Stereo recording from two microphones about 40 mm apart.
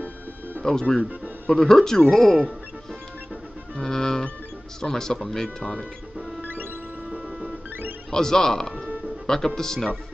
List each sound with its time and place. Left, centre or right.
0.6 s speech: centre
3.7 s speech: centre
6.4 s music: right
7.1 s music: centre
8.1 s speech: centre